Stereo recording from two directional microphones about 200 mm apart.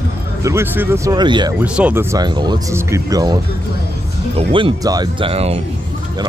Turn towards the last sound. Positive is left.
turn(degrees=-30)  # may be behind; listen again after turning